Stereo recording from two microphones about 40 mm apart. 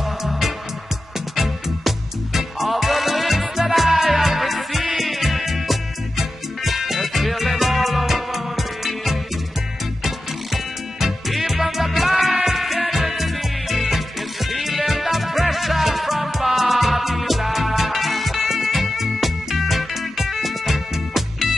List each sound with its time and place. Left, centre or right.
1.3 s music: centre